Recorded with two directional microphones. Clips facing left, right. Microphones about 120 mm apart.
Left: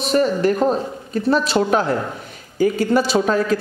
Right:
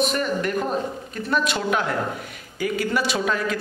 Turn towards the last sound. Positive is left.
turn(degrees=35)  # may be behind; listen again after turning